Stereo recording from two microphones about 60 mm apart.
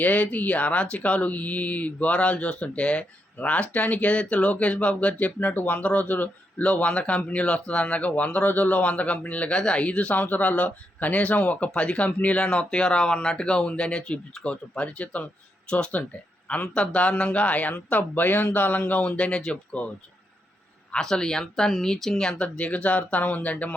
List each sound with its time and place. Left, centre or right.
0.0 s speech: left
19.7 s speech: left
20.9 s speech: centre